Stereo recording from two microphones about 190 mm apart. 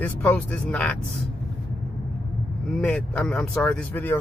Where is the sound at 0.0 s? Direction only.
5° left (ahead or behind).